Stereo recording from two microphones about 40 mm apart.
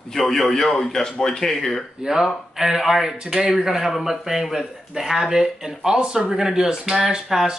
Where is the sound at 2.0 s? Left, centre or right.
Centre.